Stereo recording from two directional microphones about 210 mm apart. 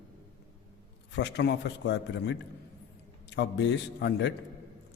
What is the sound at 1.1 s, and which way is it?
A man's voice, 55° left (ahead or behind).